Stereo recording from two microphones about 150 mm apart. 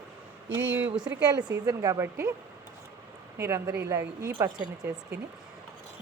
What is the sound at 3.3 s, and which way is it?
A woman's voice, 20° right (ahead or behind).